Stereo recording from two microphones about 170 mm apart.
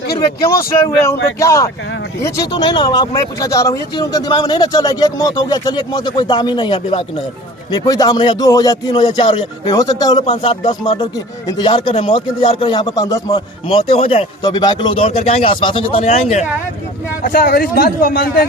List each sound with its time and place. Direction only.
0.9 s speech: 20° left (ahead or behind)
13.7 s speech: 35° left (ahead or behind)
17.2 s a man's voice: 60° left (ahead or behind)